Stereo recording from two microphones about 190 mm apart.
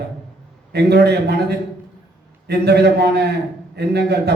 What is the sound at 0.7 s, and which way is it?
A man's voice, 60° right (ahead or behind).